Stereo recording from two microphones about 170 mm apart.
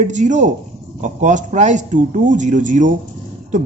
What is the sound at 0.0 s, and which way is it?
Speech, 45° right (ahead or behind).